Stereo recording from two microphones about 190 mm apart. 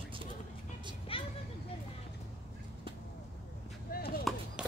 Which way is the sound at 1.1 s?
30° left (ahead or behind).